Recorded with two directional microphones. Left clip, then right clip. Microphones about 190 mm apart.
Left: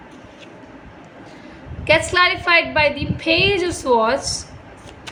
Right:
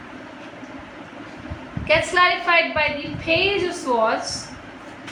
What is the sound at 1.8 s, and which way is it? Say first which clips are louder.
A woman's voice: left 2 dB; 65° left (ahead or behind).